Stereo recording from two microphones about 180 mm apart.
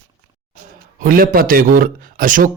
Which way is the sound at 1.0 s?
50° right (ahead or behind).